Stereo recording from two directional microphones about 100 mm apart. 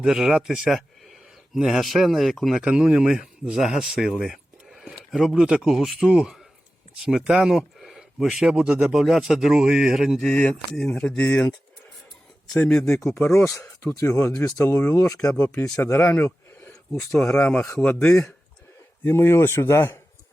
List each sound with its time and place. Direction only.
0.0 s speech: 5° right (ahead or behind)
10.2 s speech: 10° left (ahead or behind)
12.5 s speech: 10° left (ahead or behind)
13.1 s speech: 25° left (ahead or behind)
19.0 s speech: 25° left (ahead or behind)